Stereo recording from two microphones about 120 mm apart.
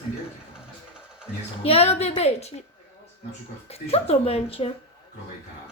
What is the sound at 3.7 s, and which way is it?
Speech, 55° left (ahead or behind).